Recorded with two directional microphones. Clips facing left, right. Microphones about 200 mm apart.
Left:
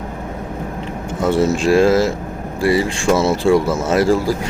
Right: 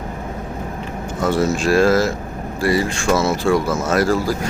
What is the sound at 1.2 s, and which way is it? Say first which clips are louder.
Speech: left 2 dB; 25° left (ahead or behind).